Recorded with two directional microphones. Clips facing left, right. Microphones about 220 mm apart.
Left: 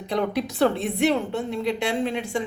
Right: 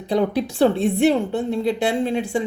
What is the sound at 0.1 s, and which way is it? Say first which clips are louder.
A woman's voice: right 5 dB; 30° right (ahead or behind).